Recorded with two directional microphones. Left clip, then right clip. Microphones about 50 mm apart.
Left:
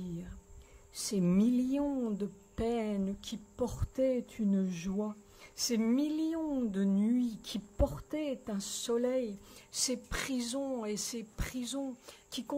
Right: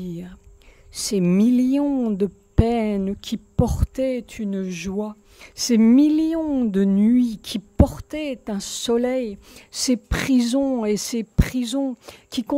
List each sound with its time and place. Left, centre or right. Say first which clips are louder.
0.9 s a woman's voice: right 11 dB; right